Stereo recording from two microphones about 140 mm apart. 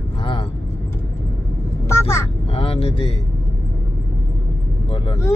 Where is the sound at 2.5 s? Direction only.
45° left (ahead or behind).